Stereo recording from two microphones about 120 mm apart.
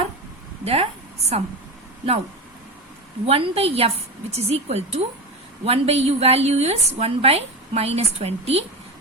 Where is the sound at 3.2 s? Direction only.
55° right (ahead or behind).